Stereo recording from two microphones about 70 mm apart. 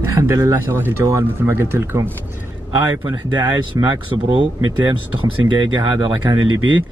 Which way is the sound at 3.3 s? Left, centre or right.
Right.